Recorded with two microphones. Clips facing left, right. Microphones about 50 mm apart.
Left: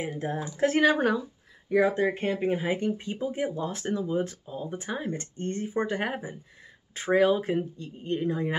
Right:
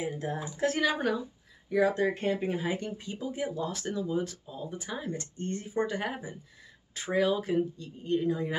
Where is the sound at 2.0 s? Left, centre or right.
Left.